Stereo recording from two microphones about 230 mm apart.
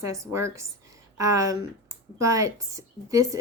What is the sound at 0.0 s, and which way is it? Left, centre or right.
A woman's voice, centre.